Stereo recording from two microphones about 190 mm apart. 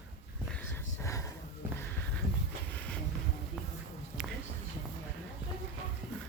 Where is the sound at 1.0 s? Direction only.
15° left (ahead or behind).